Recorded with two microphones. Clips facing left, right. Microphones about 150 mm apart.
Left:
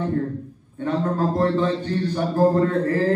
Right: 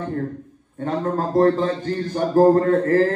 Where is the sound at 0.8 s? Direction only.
40° right (ahead or behind).